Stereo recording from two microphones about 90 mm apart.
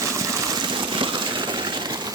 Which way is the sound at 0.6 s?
60° right (ahead or behind).